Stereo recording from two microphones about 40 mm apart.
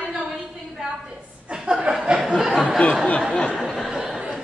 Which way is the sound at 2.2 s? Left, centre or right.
Centre.